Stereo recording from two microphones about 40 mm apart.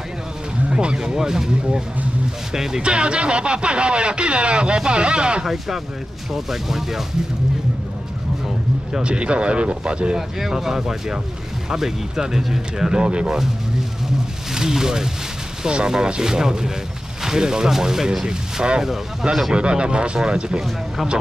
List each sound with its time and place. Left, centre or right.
0.7 s a sound: right
2.5 s speech: centre
2.8 s speech: right
5.4 s speech: centre
9.0 s speech: right
10.1 s speech: centre
14.5 s speech: centre